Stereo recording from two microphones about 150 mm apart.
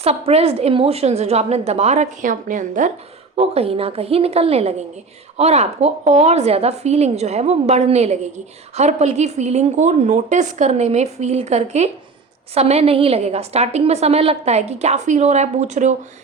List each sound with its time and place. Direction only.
0.0 s a woman's voice: 45° right (ahead or behind)
3.3 s a woman's voice: 40° right (ahead or behind)